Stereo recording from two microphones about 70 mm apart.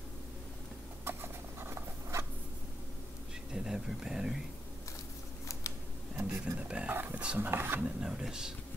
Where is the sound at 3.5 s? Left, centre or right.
Centre.